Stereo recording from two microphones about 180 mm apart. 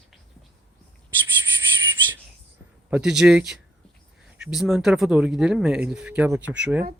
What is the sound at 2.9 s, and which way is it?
Speech, 5° right (ahead or behind).